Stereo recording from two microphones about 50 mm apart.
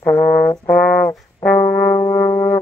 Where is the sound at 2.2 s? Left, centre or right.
Left.